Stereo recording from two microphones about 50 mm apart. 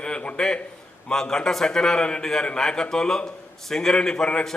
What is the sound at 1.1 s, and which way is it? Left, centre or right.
A man's voice, centre.